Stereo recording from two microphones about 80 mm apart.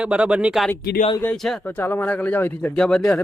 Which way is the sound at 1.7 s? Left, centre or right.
Left.